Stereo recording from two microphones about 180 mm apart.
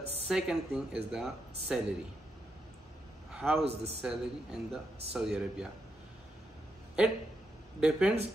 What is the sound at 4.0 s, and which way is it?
A man's voice, 5° right (ahead or behind).